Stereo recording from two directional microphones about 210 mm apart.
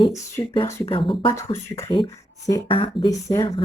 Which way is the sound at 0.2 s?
15° left (ahead or behind).